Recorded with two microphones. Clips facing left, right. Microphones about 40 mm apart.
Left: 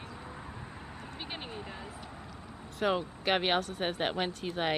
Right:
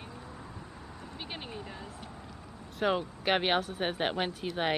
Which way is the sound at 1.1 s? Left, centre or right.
Centre.